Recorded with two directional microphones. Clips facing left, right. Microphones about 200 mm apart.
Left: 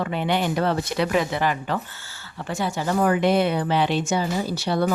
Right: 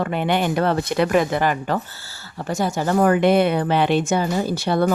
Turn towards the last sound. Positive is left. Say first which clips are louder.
# right 3 dB
turn(degrees=-50)  # may be behind; listen again after turning